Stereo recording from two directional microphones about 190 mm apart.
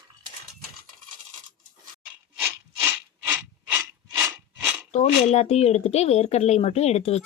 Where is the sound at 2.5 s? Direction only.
10° right (ahead or behind).